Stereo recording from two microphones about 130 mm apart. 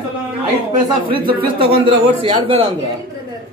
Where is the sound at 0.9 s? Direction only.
40° right (ahead or behind).